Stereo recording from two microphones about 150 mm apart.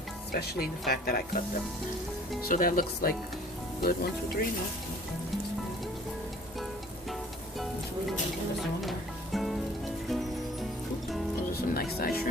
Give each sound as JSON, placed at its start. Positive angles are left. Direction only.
{"t": 0.3, "sound": "speech", "side_deg": 90}
{"t": 2.4, "sound": "speech", "side_deg": 65}
{"t": 3.8, "sound": "speech", "side_deg": 90}
{"t": 8.8, "sound": "music", "side_deg": 0}
{"t": 11.5, "sound": "speech", "side_deg": 90}